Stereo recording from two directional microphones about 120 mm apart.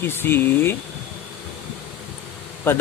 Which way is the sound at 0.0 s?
20° left (ahead or behind).